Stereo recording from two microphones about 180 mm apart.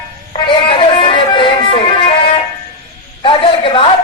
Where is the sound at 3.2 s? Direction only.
30° left (ahead or behind).